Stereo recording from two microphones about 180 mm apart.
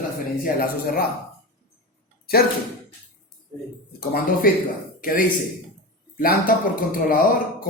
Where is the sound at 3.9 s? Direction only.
55° left (ahead or behind).